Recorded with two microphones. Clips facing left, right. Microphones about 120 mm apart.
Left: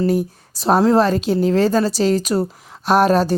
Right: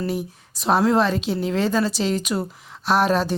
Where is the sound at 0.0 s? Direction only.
40° left (ahead or behind).